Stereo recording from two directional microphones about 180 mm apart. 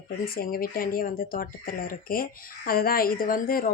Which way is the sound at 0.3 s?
55° left (ahead or behind).